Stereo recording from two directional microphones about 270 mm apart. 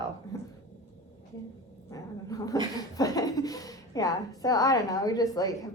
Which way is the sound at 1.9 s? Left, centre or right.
Centre.